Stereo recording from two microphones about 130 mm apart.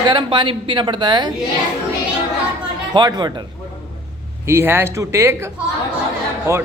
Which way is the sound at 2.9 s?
35° right (ahead or behind).